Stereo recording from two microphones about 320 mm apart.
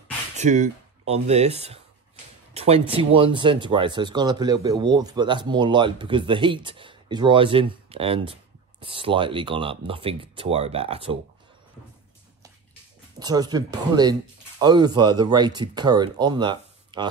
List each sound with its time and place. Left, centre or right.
0.4 s speech: right
13.2 s speech: centre